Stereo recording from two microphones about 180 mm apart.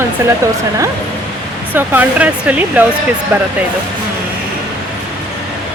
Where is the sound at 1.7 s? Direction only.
10° right (ahead or behind).